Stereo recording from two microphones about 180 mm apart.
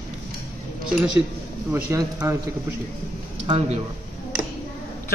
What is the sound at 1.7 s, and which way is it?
Speech, 15° right (ahead or behind).